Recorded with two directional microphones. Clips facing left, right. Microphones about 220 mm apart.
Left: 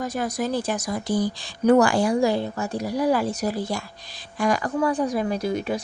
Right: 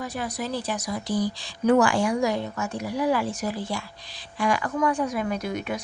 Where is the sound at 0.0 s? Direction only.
45° left (ahead or behind).